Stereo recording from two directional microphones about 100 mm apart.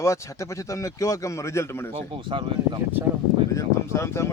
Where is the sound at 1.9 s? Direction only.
60° right (ahead or behind).